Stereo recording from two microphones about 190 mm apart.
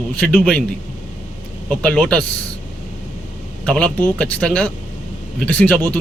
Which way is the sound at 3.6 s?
5° left (ahead or behind).